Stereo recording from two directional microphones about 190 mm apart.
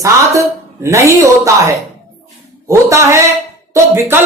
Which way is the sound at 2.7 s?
15° right (ahead or behind).